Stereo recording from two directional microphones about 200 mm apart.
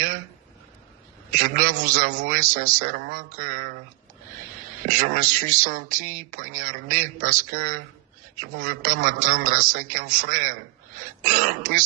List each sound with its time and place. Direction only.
1.4 s speech: 45° right (ahead or behind)
4.9 s speech: 40° right (ahead or behind)